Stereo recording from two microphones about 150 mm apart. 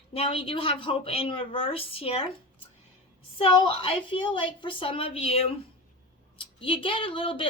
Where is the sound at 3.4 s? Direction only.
40° left (ahead or behind).